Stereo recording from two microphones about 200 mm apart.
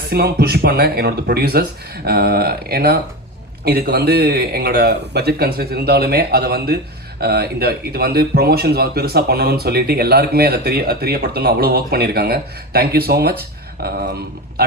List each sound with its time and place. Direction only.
0.0 s speech: 50° right (ahead or behind)